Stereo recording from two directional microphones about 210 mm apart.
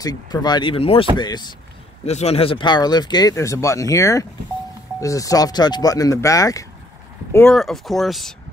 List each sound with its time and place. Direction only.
0.0 s speech: 20° left (ahead or behind)
7.3 s speech: 5° left (ahead or behind)